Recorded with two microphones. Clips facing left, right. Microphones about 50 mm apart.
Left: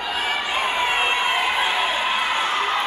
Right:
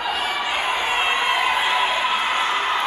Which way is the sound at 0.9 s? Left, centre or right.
Centre.